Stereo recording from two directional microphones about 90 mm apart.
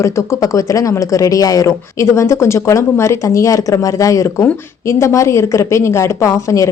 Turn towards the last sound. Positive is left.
turn(degrees=35)  # may be behind; listen again after turning